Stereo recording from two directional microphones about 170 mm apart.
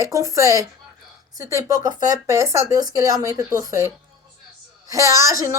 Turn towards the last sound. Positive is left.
turn(degrees=-20)  # may be behind; listen again after turning